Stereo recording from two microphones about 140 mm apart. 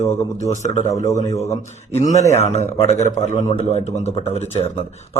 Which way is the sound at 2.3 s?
50° left (ahead or behind).